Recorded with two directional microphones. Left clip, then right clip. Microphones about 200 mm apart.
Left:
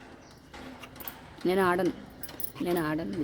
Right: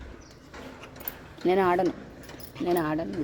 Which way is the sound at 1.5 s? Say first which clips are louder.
Right 3 dB; 10° left (ahead or behind).